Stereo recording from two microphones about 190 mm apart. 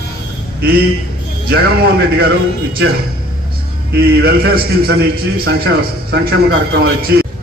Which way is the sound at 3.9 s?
55° right (ahead or behind).